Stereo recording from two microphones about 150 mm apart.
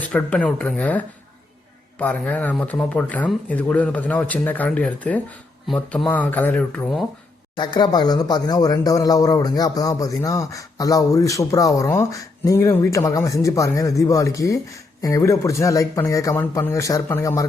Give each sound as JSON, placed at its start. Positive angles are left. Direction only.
{"t": 0.0, "sound": "speech", "side_deg": 10}
{"t": 7.5, "sound": "speech", "side_deg": 30}